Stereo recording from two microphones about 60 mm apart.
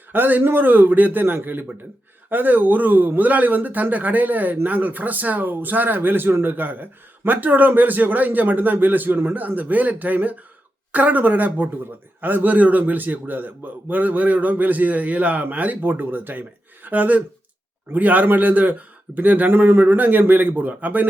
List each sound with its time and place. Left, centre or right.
0.1 s a man's voice: right